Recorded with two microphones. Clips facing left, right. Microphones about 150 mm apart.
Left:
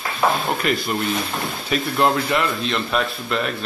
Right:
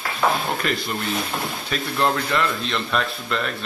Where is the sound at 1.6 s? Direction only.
15° left (ahead or behind).